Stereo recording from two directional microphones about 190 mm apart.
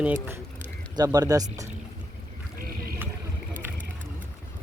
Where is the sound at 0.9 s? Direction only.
20° right (ahead or behind).